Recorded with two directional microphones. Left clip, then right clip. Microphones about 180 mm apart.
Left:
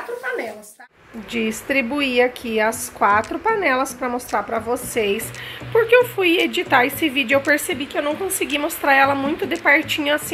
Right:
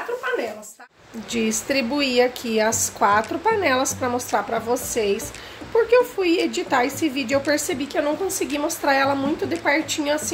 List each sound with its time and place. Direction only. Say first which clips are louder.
1.3 s a woman's voice: left 2 dB; 10° right (ahead or behind)